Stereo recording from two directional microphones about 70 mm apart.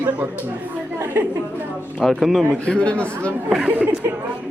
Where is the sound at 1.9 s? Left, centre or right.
Centre.